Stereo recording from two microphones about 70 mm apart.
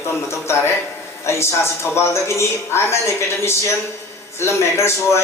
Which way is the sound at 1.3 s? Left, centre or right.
Left.